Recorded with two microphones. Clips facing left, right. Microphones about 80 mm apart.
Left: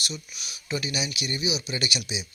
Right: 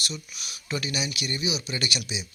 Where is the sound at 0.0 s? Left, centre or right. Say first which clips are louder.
Even; centre.